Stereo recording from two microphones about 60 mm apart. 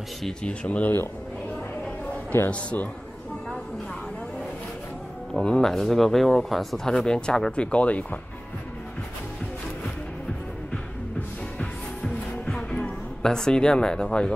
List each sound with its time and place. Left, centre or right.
0.4 s speech: left
2.3 s a man's voice: left
5.3 s speech: centre
6.9 s speech: centre
10.7 s music: left